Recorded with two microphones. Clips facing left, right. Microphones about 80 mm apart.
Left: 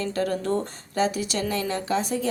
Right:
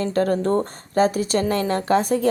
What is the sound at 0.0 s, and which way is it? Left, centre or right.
Speech, right.